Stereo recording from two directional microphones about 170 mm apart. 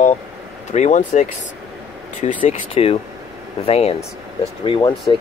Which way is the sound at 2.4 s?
40° left (ahead or behind).